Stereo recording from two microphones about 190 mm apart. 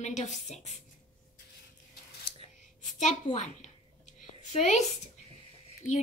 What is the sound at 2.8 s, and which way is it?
A child's voice, 40° left (ahead or behind).